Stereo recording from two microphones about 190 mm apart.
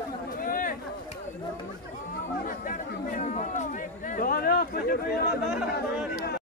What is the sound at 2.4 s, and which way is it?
Chatter, 45° left (ahead or behind).